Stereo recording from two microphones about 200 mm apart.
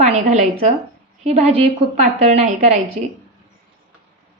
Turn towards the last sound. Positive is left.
turn(degrees=-35)  # may be behind; listen again after turning